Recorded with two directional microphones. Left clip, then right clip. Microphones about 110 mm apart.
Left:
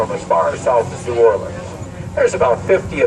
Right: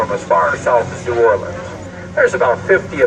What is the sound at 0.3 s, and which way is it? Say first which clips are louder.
Speech: right 1 dB; 40° left (ahead or behind).